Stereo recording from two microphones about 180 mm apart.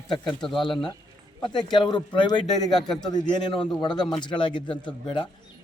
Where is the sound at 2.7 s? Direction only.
Centre (ahead or behind).